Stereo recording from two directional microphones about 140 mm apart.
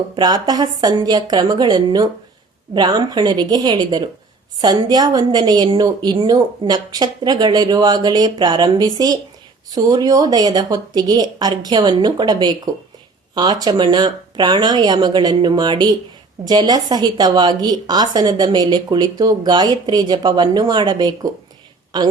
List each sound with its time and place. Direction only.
0.2 s a woman's voice: 30° right (ahead or behind)